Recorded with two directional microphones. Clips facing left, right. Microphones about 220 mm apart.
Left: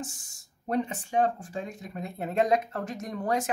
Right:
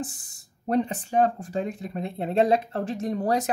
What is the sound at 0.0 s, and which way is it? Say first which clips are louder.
Speech: right 5 dB; 35° right (ahead or behind).